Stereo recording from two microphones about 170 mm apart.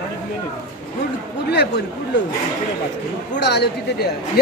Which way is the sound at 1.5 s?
80° left.